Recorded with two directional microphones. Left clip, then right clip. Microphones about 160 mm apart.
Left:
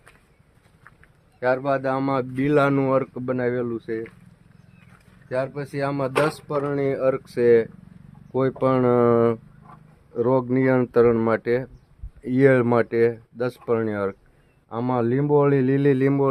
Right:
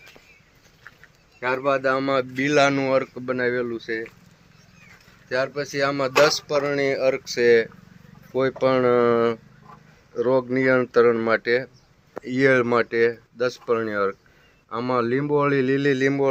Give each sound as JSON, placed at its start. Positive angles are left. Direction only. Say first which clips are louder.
{"t": 1.4, "sound": "speech", "louder": "even", "side_deg": 70}
{"t": 5.3, "sound": "speech", "louder": "right 2 dB", "side_deg": 90}
{"t": 12.2, "sound": "speech", "louder": "left 1 dB", "side_deg": 90}
{"t": 14.7, "sound": "speech", "louder": "right 1 dB", "side_deg": 75}